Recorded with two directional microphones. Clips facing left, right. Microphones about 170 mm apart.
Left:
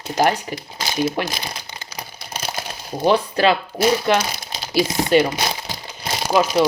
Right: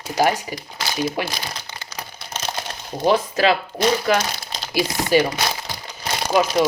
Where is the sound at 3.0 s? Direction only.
5° right (ahead or behind).